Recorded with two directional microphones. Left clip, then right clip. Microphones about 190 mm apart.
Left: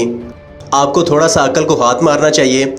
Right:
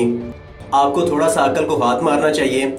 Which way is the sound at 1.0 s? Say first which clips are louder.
Left 5 dB; 40° left (ahead or behind).